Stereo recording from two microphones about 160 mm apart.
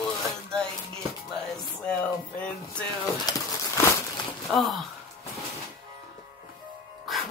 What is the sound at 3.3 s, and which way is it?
Crumpling, 20° left (ahead or behind).